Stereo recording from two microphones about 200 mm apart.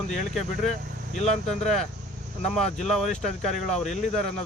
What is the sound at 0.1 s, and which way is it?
Speech, centre (ahead or behind).